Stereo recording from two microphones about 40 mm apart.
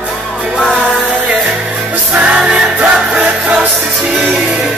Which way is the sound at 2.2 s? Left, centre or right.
Right.